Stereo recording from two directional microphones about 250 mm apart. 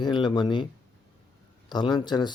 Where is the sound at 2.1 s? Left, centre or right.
Centre.